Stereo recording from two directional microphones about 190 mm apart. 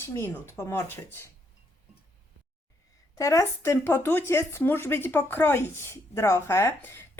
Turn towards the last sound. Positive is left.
turn(degrees=10)  # may be behind; listen again after turning